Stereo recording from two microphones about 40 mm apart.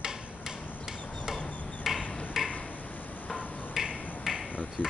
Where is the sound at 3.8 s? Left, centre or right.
Centre.